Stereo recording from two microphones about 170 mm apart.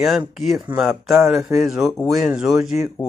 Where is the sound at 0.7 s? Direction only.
30° right (ahead or behind).